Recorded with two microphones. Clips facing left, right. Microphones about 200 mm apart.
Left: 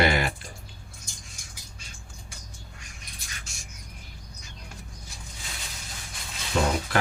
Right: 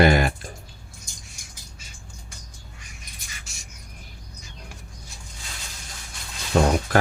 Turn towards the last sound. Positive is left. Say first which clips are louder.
# right 5 dB
turn(degrees=-50)  # may be behind; listen again after turning